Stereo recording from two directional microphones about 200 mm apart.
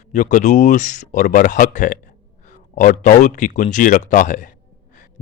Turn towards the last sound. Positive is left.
turn(degrees=40)  # may be behind; listen again after turning